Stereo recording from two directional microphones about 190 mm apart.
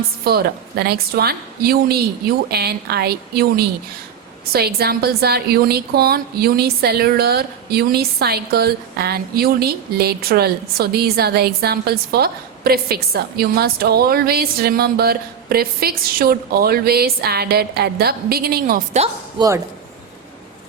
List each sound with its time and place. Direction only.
0.3 s a woman's voice: 55° right (ahead or behind)
19.4 s speech: 15° right (ahead or behind)